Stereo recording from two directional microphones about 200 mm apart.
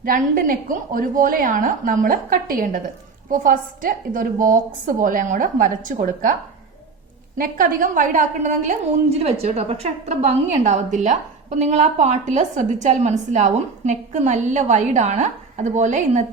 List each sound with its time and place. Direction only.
0.0 s a woman's voice: 45° right (ahead or behind)
7.3 s a woman's voice: 40° right (ahead or behind)